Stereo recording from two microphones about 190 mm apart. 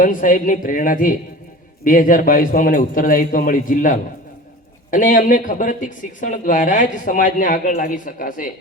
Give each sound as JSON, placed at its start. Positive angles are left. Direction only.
{"t": 0.0, "sound": "speech", "side_deg": 45}